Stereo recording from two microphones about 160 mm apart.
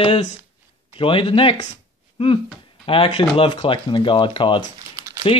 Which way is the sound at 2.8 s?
35° left (ahead or behind).